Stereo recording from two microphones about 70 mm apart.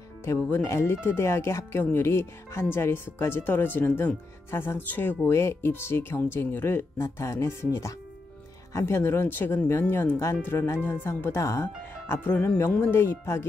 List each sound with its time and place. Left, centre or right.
0.2 s speech: left
5.3 s speech: left